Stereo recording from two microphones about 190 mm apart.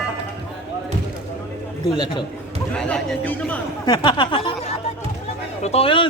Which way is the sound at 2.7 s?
5° left (ahead or behind).